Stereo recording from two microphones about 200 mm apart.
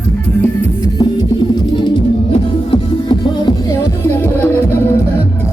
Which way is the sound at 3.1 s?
20° left (ahead or behind).